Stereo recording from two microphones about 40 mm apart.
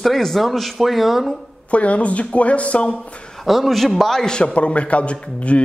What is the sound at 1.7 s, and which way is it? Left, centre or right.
A man's voice, left.